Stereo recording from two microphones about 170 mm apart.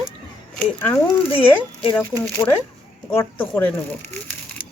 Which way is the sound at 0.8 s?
10° left (ahead or behind).